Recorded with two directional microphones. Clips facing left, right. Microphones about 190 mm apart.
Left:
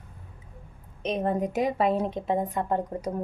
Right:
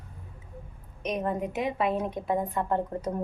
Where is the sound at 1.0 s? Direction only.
30° left (ahead or behind); by 3.1 s 15° left (ahead or behind).